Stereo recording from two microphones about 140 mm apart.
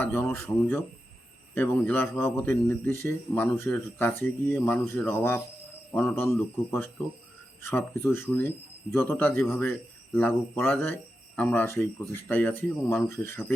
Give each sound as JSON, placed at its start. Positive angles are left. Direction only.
{"t": 0.0, "sound": "a man's voice", "side_deg": 15}
{"t": 1.5, "sound": "a man's voice", "side_deg": 15}
{"t": 6.3, "sound": "a man's voice", "side_deg": 15}